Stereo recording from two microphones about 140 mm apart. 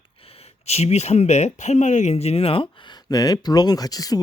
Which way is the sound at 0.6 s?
50° left (ahead or behind).